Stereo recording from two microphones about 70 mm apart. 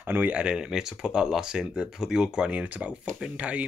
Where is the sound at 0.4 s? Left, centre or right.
Centre.